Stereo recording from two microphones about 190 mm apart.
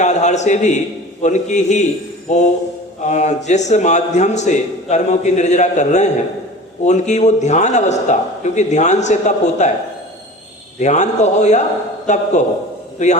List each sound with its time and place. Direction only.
0.0 s a man's voice: 35° left (ahead or behind)
10.8 s a man's voice: 40° left (ahead or behind)